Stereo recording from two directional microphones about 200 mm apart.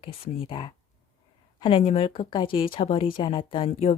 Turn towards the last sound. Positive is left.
turn(degrees=30)  # may be behind; listen again after turning